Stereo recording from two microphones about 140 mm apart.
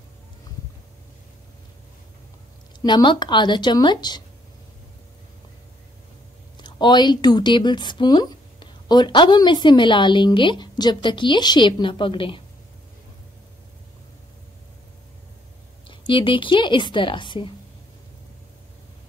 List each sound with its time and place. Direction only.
2.8 s speech: 30° left (ahead or behind)
6.5 s speech: 30° left (ahead or behind)
15.9 s speech: 35° left (ahead or behind)